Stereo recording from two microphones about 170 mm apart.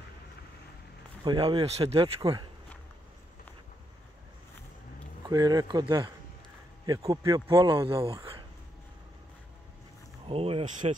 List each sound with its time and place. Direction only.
1.2 s speech: 25° right (ahead or behind)
5.2 s speech: 25° right (ahead or behind)
7.6 s speech: 30° right (ahead or behind)
10.2 s speech: 35° right (ahead or behind)